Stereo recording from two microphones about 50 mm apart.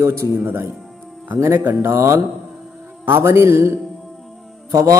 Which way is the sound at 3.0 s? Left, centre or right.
Right.